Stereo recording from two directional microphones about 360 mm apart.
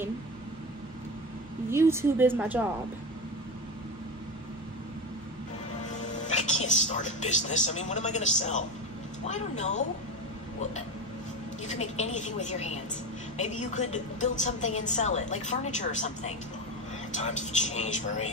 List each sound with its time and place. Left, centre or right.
1.7 s a woman's voice: centre
5.9 s a woman's voice: centre
11.6 s a woman's voice: centre